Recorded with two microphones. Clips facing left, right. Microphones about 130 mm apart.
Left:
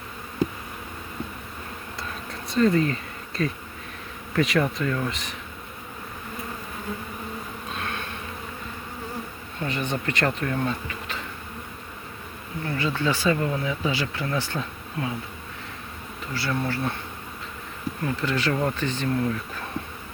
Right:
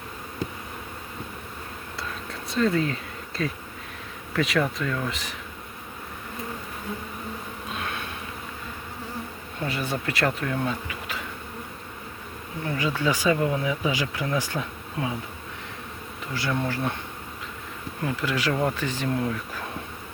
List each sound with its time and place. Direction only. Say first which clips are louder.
2.5 s speech: left 3 dB; centre (ahead or behind)
9.6 s speech: left 1 dB; 10° right (ahead or behind)
12.6 s speech: even; 10° right (ahead or behind)
16.3 s speech: even; 15° right (ahead or behind)
18.0 s speech: even; 10° right (ahead or behind)